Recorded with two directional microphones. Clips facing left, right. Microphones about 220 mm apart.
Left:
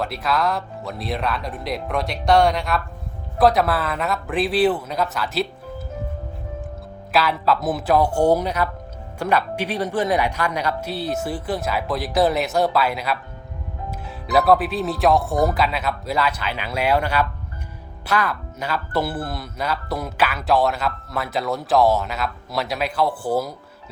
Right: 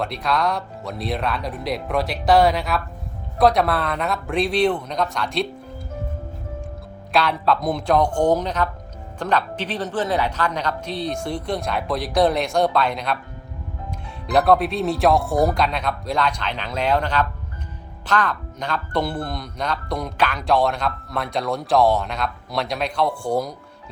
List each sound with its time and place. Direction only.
0.0 s speech: centre (ahead or behind)
7.1 s speech: 5° left (ahead or behind)
13.9 s music: 5° left (ahead or behind)
14.3 s speech: centre (ahead or behind)